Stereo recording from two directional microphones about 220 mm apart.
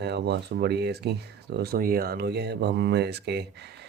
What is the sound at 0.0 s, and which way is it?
Speech, 50° right (ahead or behind).